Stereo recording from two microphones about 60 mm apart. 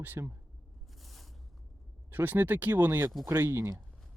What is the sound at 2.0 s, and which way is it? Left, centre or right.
Speech, right.